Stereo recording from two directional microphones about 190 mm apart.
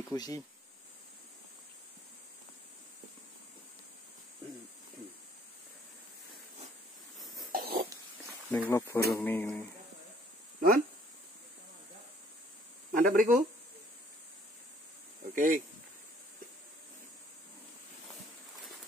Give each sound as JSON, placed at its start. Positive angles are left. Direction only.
{"t": 0.1, "sound": "speech", "side_deg": 20}
{"t": 7.5, "sound": "cough", "side_deg": -50}
{"t": 8.5, "sound": "speech", "side_deg": 10}
{"t": 12.9, "sound": "speech", "side_deg": -45}
{"t": 15.2, "sound": "speech", "side_deg": -45}